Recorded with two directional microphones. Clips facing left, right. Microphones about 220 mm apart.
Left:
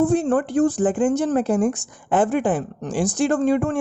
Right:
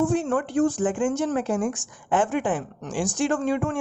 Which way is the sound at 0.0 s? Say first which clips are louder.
Left 4 dB; 35° left (ahead or behind).